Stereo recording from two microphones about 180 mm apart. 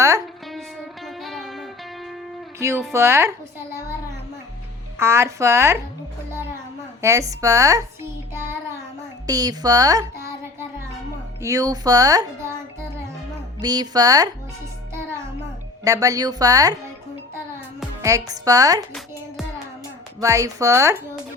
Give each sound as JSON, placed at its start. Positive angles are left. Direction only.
{"t": 1.0, "sound": "music", "side_deg": 0}
{"t": 2.6, "sound": "speech", "side_deg": -15}
{"t": 4.9, "sound": "speech", "side_deg": -15}
{"t": 7.0, "sound": "a child's voice", "side_deg": -15}
{"t": 11.4, "sound": "speech", "side_deg": -20}
{"t": 13.6, "sound": "speech", "side_deg": -20}
{"t": 15.8, "sound": "speech", "side_deg": -20}
{"t": 18.0, "sound": "speech", "side_deg": -20}
{"t": 20.2, "sound": "speech", "side_deg": -15}